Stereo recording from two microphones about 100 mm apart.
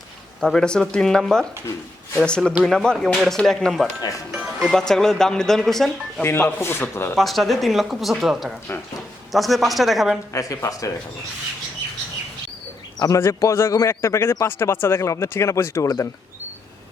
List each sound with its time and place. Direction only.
0.3 s speech: 5° left (ahead or behind)
4.8 s speech: 5° left (ahead or behind)
6.6 s a man's voice: 20° left (ahead or behind)
7.2 s speech: centre (ahead or behind)
10.3 s speech: 35° left (ahead or behind)
13.0 s a man's voice: 30° left (ahead or behind)